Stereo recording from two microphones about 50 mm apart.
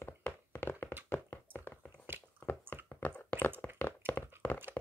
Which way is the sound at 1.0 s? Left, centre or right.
Left.